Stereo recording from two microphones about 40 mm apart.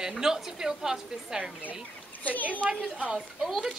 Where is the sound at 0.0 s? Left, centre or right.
Centre.